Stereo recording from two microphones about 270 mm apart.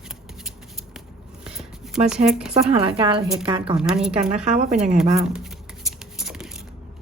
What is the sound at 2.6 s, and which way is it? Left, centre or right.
Speech, right.